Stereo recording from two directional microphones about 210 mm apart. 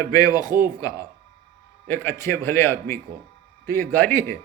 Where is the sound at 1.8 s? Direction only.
10° left (ahead or behind).